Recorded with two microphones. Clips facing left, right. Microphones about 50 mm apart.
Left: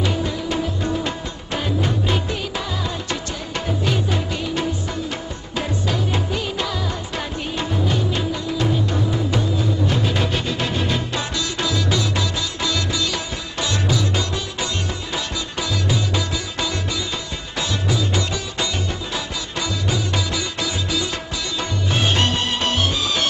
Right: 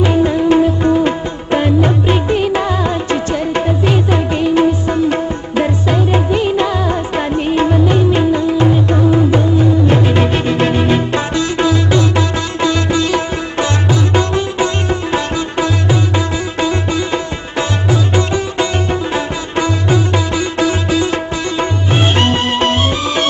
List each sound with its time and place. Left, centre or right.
0.0 s music: right